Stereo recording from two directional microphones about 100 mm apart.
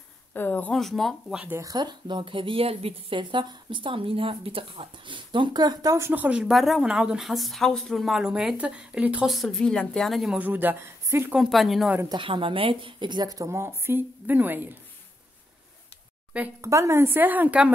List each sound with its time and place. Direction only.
0.3 s a woman's voice: 20° left (ahead or behind)
0.7 s speech: centre (ahead or behind)
1.3 s speech: 15° right (ahead or behind)
1.6 s speech: 40° right (ahead or behind); by 3.2 s 75° right (ahead or behind)
3.2 s speech: 50° right (ahead or behind)
6.0 s speech: 15° right (ahead or behind)
6.5 s speech: centre (ahead or behind)
9.3 s speech: centre (ahead or behind)
10.3 s a woman's voice: 20° right (ahead or behind)
11.3 s speech: centre (ahead or behind)
12.1 s speech: 55° right (ahead or behind); by 13.6 s 40° right (ahead or behind)
13.6 s a woman's voice: 25° right (ahead or behind)
16.6 s a woman's voice: 30° right (ahead or behind); by 17.7 s 15° right (ahead or behind)